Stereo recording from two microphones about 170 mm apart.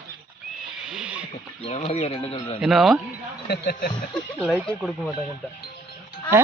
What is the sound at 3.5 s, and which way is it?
Speech, 70° left (ahead or behind).